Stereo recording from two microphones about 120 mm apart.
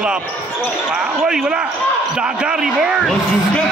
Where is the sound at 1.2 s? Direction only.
5° right (ahead or behind).